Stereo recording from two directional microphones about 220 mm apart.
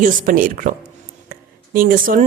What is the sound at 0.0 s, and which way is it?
Speech, 35° right (ahead or behind).